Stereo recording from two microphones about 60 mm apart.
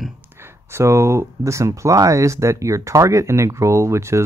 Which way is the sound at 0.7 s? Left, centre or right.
Right.